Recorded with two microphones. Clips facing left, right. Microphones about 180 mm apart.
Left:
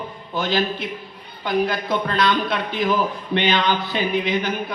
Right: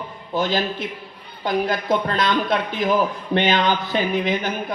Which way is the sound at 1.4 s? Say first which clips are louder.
Even; 45° right (ahead or behind).